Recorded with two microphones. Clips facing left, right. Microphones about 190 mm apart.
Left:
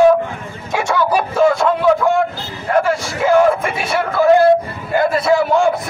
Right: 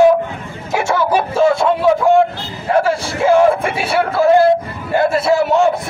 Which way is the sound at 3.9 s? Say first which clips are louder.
Even; 30° right (ahead or behind).